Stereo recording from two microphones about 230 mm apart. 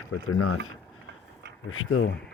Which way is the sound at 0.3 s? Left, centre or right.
Left.